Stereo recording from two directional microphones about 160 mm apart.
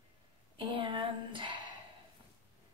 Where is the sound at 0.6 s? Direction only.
30° right (ahead or behind).